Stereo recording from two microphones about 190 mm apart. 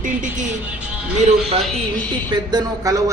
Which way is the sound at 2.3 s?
20° right (ahead or behind).